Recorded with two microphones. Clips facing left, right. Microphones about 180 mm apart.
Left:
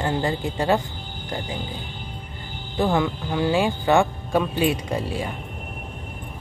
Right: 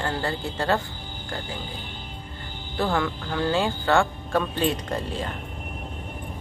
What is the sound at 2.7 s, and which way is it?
Speech, 15° left (ahead or behind).